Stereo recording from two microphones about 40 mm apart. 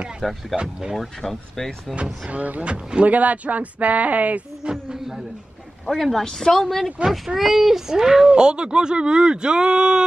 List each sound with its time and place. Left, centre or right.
0.2 s speech: centre
2.2 s speech: right
4.6 s speech: centre
5.9 s speech: centre
6.2 s a woman's voice: centre; by 10.0 s right